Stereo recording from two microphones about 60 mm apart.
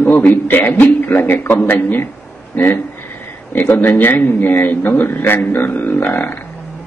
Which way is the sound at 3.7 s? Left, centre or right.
Left.